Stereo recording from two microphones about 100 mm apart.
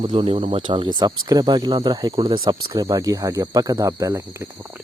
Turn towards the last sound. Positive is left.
turn(degrees=-30)  # may be behind; listen again after turning